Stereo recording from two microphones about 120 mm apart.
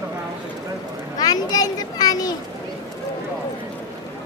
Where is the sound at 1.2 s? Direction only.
30° left (ahead or behind).